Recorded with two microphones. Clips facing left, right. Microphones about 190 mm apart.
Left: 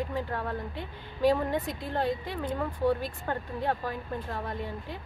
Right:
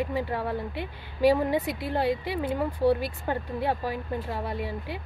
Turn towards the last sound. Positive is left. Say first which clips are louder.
# right 3 dB
turn(degrees=-10)  # may be behind; listen again after turning